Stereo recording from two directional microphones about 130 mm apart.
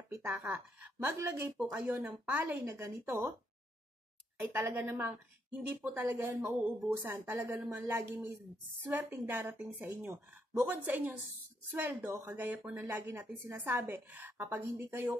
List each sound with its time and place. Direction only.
0.1 s a woman's voice: 20° right (ahead or behind)
4.4 s a woman's voice: 15° right (ahead or behind)